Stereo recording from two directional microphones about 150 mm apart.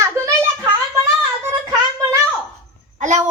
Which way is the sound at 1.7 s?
20° right (ahead or behind).